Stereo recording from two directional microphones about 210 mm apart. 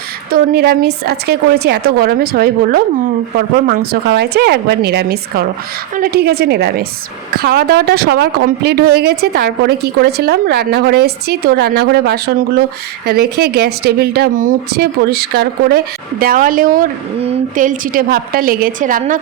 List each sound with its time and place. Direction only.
0.3 s a woman's voice: 45° right (ahead or behind)